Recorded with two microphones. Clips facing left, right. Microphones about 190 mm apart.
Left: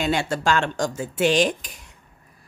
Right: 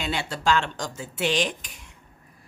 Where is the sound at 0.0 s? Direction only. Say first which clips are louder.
Left 5 dB; 45° left (ahead or behind).